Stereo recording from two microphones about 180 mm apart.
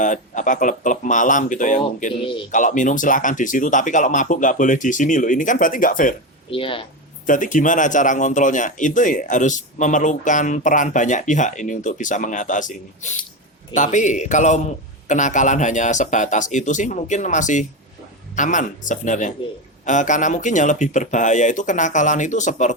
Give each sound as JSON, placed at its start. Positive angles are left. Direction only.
{"t": 0.0, "sound": "speech", "side_deg": 45}
{"t": 6.5, "sound": "speech", "side_deg": 30}
{"t": 7.3, "sound": "speech", "side_deg": 45}